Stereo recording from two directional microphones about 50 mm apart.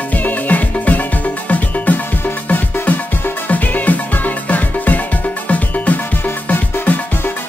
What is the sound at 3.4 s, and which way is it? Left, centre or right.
Music, left.